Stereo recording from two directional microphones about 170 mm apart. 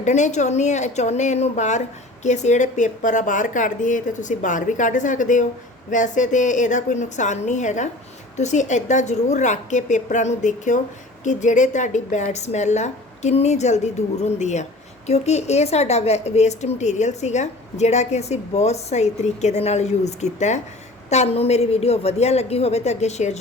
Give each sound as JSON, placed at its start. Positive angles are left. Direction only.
{"t": 0.0, "sound": "a woman's voice", "side_deg": 45}